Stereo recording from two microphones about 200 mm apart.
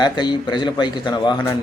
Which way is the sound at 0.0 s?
20° left (ahead or behind).